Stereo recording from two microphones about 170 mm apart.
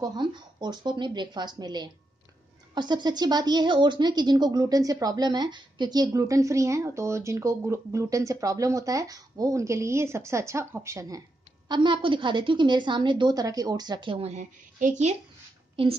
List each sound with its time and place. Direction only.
0.0 s a woman's voice: 25° right (ahead or behind); by 15.1 s 45° right (ahead or behind)
15.7 s a woman's voice: 30° right (ahead or behind)